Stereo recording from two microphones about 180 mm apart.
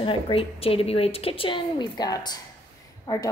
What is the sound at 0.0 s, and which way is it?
A woman's voice, 30° left (ahead or behind).